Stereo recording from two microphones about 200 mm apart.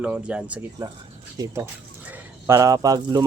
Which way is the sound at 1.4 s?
15° right (ahead or behind).